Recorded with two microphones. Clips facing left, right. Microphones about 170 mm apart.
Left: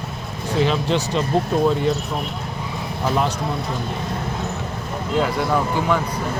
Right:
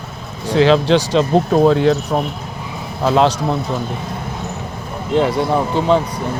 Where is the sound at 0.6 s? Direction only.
90° right; by 2.2 s 75° right (ahead or behind).